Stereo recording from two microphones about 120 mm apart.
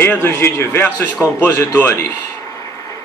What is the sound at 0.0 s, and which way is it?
A man's voice, 20° left (ahead or behind).